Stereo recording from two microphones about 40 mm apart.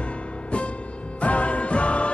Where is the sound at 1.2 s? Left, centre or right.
Left.